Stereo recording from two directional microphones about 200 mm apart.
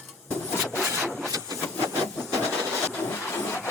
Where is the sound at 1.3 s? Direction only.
20° right (ahead or behind).